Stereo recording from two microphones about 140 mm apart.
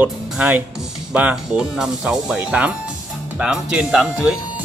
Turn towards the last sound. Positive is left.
turn(degrees=-5)  # may be behind; listen again after turning